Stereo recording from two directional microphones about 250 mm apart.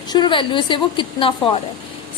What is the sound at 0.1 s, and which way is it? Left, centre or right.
A woman's voice, centre.